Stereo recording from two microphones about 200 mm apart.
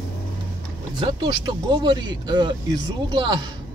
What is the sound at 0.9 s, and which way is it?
A man's voice, 25° right (ahead or behind).